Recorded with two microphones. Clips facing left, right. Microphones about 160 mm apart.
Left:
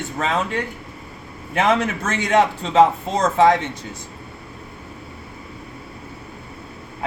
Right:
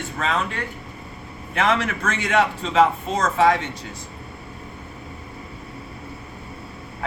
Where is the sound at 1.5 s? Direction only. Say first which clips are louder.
Left 3 dB; 25° left (ahead or behind).